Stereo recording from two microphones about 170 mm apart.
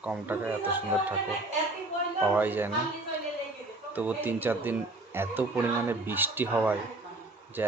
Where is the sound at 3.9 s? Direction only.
10° right (ahead or behind).